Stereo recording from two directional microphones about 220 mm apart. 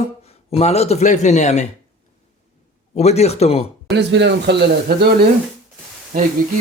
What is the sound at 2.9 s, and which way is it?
Speech, 30° left (ahead or behind).